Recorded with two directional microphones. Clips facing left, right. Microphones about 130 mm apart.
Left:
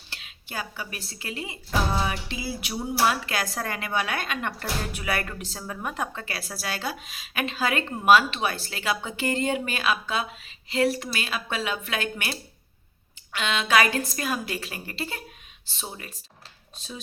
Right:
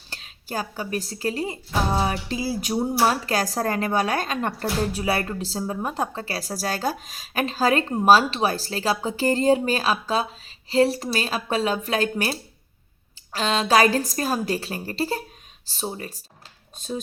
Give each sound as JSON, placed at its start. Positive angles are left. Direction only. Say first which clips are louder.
{"t": 0.1, "sound": "speech", "louder": "right 6 dB", "side_deg": -40}
{"t": 16.7, "sound": "speech", "louder": "right 10 dB", "side_deg": -50}